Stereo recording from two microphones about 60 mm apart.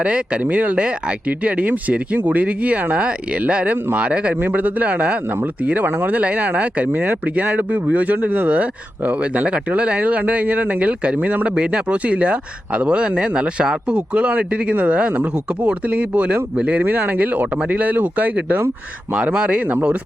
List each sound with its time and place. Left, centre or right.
0.0 s speech: centre
4.4 s speech: right
16.8 s speech: right